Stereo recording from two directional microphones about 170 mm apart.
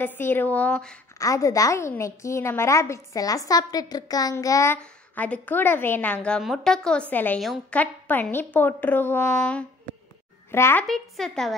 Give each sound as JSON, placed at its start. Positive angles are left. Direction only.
{"t": 0.0, "sound": "a woman's voice", "side_deg": 10}
{"t": 1.1, "sound": "a woman's voice", "side_deg": 20}
{"t": 4.7, "sound": "a woman's voice", "side_deg": 10}
{"t": 10.9, "sound": "speech", "side_deg": 0}